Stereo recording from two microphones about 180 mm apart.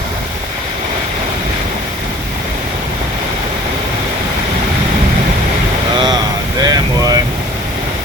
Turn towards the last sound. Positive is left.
turn(degrees=-20)  # may be behind; listen again after turning